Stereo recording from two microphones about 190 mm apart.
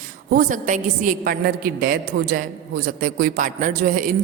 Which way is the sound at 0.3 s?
45° right (ahead or behind).